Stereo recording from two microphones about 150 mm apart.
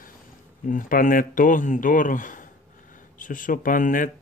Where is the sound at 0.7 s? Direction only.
65° left (ahead or behind).